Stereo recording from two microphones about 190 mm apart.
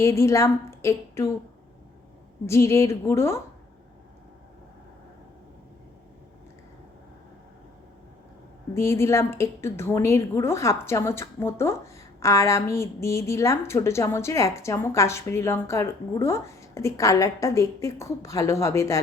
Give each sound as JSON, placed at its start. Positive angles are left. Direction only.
{"t": 0.0, "sound": "a woman's voice", "side_deg": 15}
{"t": 2.5, "sound": "a woman's voice", "side_deg": 15}
{"t": 8.7, "sound": "a woman's voice", "side_deg": 15}